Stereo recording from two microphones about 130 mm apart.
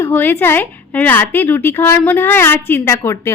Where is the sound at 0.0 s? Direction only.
15° left (ahead or behind).